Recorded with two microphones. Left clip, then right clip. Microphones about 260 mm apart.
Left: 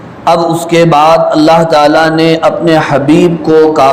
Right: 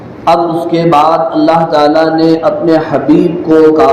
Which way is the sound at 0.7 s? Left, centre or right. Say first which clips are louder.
Left 3 dB; left.